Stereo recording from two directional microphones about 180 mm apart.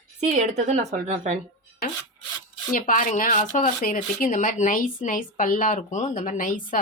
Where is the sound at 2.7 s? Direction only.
50° left (ahead or behind).